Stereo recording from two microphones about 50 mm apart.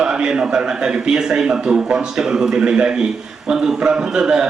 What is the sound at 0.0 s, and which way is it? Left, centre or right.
A man's voice, centre.